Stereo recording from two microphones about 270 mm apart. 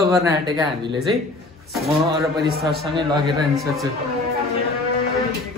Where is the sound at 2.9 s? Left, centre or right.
Centre.